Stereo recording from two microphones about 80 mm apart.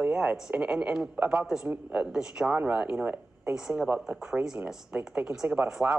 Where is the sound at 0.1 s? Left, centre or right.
Centre.